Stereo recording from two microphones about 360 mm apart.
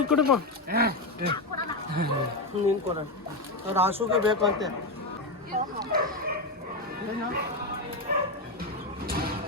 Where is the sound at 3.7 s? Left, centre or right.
Centre.